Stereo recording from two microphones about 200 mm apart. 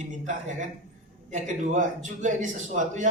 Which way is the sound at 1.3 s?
40° right (ahead or behind).